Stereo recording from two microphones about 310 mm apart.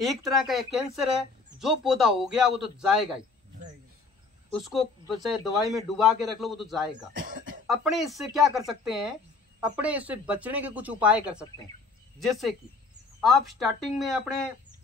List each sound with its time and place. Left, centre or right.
0.0 s speech: centre
4.6 s speech: centre
7.2 s cough: right
7.6 s speech: centre